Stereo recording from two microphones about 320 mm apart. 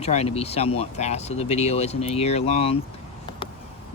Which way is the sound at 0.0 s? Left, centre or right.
Centre.